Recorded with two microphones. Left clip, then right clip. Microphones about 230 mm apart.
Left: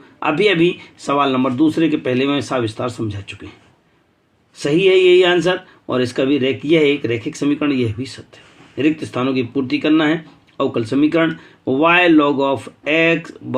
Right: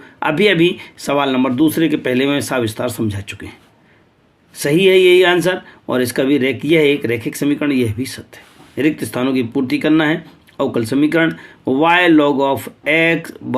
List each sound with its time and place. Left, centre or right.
0.2 s speech: right
4.6 s speech: right